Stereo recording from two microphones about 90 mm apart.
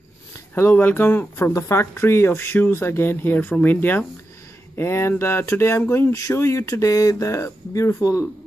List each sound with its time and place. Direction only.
0.6 s speech: 25° left (ahead or behind); by 8.3 s 40° left (ahead or behind)